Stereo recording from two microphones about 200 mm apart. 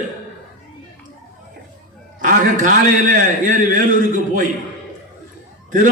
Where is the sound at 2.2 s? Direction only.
45° right (ahead or behind).